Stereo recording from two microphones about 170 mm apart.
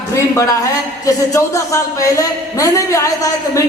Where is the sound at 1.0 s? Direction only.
20° left (ahead or behind).